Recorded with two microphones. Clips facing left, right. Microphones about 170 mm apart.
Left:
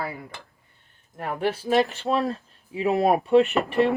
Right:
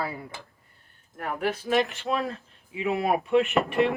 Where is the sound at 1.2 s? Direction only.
30° left (ahead or behind).